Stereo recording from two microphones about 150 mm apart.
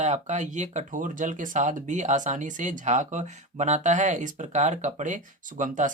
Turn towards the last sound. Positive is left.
turn(degrees=-60)  # may be behind; listen again after turning